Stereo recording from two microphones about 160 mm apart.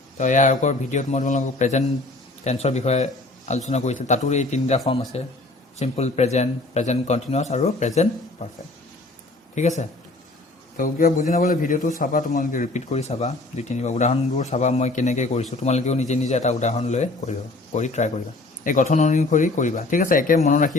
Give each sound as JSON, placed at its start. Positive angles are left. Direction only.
{"t": 0.2, "sound": "speech", "side_deg": 50}
{"t": 9.6, "sound": "speech", "side_deg": 45}
{"t": 10.8, "sound": "a man's voice", "side_deg": 60}